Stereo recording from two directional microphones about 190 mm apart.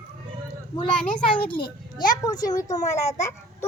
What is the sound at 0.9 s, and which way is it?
Speech, 5° left (ahead or behind).